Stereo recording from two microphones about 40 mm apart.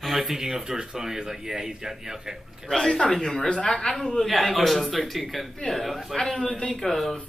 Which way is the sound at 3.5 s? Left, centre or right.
Left.